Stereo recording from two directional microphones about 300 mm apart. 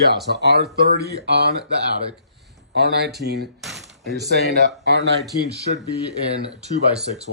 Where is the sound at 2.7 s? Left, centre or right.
Right.